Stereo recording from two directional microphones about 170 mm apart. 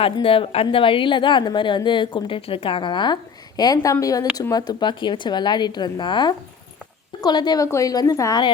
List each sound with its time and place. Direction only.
0.0 s speech: 30° left (ahead or behind)